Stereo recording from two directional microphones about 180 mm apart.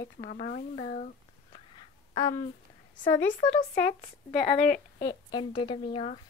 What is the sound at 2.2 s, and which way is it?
Speech, 20° left (ahead or behind).